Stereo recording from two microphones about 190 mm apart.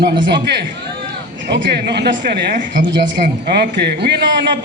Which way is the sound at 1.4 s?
60° right (ahead or behind).